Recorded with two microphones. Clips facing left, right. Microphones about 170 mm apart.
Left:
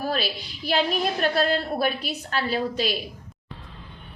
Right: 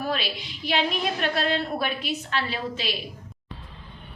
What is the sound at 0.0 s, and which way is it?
A woman's voice, 40° left (ahead or behind).